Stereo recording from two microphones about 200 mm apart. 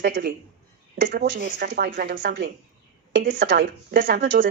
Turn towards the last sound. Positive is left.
turn(degrees=-55)  # may be behind; listen again after turning